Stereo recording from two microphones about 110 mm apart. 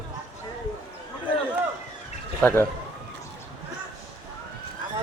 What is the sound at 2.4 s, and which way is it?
Speech, 15° left (ahead or behind).